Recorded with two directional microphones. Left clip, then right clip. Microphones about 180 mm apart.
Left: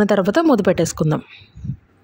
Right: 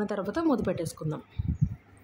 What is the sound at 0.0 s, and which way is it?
Speech, 45° left (ahead or behind).